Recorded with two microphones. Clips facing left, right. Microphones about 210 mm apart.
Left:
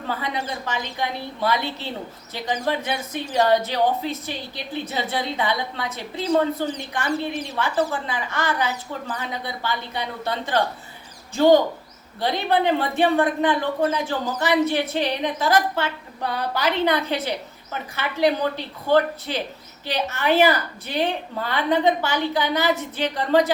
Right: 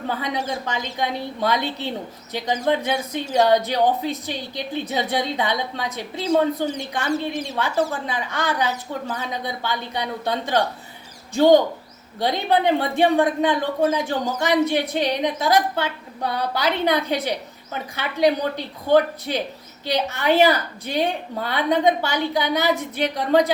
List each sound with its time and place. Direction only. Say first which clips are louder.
0.7 s a woman's voice: right 2 dB; 15° right (ahead or behind)
13.0 s a woman's voice: right 1 dB; 15° right (ahead or behind)